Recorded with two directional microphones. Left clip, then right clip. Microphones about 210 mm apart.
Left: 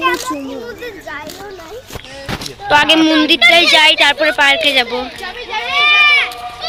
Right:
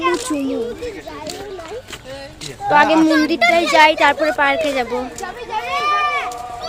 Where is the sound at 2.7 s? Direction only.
5° right (ahead or behind).